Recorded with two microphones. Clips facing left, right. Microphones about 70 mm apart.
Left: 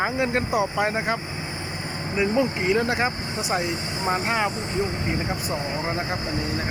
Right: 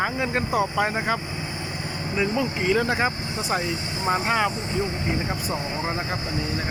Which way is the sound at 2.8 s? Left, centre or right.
Centre.